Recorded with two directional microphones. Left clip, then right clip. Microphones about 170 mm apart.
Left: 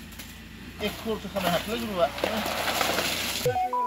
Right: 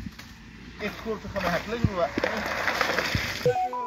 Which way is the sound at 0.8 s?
5° left (ahead or behind).